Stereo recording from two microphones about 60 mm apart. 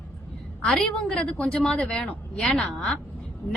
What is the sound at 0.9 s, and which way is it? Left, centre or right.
A woman's voice, centre.